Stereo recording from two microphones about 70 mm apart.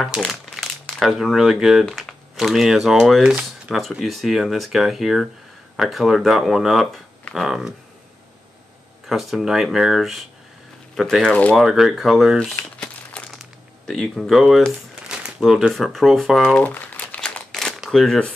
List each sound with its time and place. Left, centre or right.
0.3 s speech: centre
9.1 s speech: centre
11.2 s speech: left
11.5 s speech: centre
12.4 s crumpling: centre
13.8 s speech: centre
15.0 s speech: centre
16.5 s crumpling: left
17.2 s crumpling: centre
17.7 s shuffling cards: centre